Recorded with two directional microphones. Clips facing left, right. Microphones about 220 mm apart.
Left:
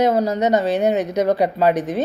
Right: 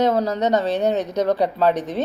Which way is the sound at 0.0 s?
5° left (ahead or behind).